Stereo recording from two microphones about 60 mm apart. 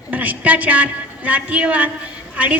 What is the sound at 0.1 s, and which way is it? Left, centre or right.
A man's voice, right.